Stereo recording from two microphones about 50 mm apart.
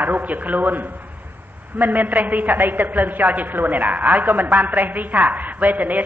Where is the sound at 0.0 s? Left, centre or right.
Right.